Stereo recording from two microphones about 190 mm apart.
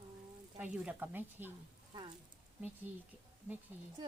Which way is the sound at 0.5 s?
5° right (ahead or behind).